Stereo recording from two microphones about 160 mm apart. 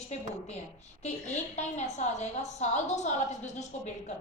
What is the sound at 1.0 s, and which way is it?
A woman's voice, 45° left (ahead or behind).